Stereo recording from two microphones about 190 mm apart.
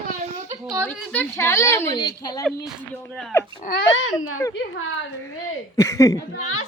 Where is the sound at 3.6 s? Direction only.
50° left (ahead or behind).